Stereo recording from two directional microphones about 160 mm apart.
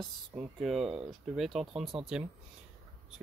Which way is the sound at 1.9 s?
40° right (ahead or behind).